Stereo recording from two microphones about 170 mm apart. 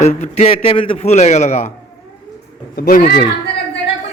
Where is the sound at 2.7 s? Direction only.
60° left (ahead or behind).